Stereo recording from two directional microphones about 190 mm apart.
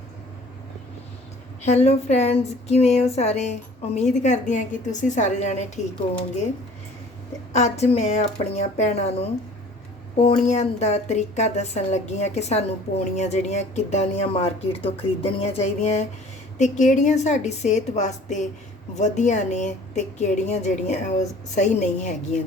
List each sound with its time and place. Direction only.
1.6 s a woman's voice: 35° left (ahead or behind)
7.5 s a woman's voice: 35° left (ahead or behind)
10.2 s a woman's voice: 35° left (ahead or behind)